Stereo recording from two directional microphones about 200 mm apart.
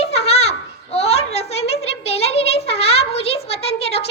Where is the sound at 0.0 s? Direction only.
30° left (ahead or behind).